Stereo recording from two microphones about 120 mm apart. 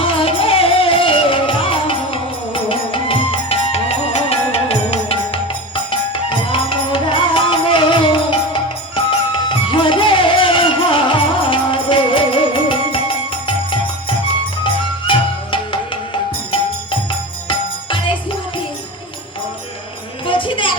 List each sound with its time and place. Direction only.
0.0 s music: 50° left (ahead or behind)
14.6 s music: 45° left (ahead or behind)
17.5 s music: 45° left (ahead or behind)
20.2 s a sound: 45° left (ahead or behind)